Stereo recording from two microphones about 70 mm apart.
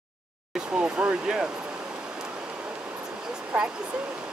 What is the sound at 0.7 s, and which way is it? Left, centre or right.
Speech, centre.